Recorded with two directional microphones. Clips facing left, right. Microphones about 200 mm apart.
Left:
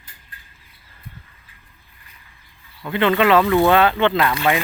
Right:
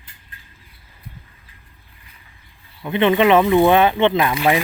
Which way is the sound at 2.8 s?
20° right (ahead or behind).